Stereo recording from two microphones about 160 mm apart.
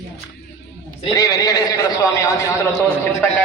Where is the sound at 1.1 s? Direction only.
20° left (ahead or behind).